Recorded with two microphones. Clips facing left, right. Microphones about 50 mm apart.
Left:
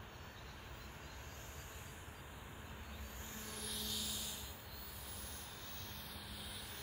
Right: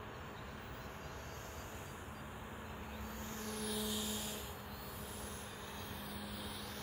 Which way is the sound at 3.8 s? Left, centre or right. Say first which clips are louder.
Right 5 dB; centre.